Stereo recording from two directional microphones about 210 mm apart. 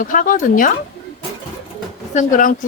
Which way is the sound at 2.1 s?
40° left (ahead or behind).